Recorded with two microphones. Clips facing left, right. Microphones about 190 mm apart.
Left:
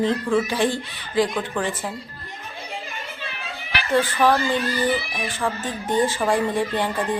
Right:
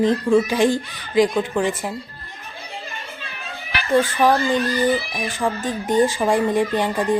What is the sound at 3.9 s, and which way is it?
Speech, 15° right (ahead or behind).